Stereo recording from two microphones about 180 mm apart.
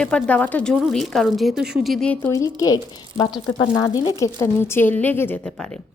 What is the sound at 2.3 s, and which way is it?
A woman's voice, 20° left (ahead or behind).